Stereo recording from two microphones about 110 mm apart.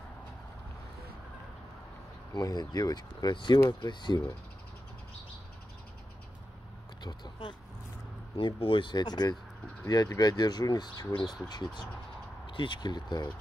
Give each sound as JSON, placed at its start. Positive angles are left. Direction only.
{"t": 2.3, "sound": "speech", "side_deg": 40}
{"t": 7.0, "sound": "speech", "side_deg": 40}
{"t": 12.4, "sound": "speech", "side_deg": 50}